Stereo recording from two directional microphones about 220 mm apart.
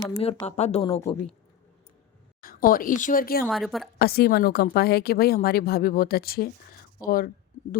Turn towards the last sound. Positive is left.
turn(degrees=40)  # may be behind; listen again after turning